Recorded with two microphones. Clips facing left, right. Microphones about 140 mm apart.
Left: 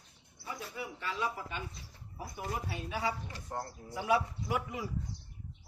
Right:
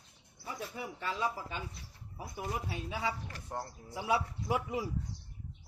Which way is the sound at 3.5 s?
5° right (ahead or behind).